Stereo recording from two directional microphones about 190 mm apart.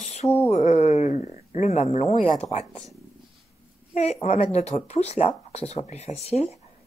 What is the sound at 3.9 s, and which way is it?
Speech, 35° left (ahead or behind).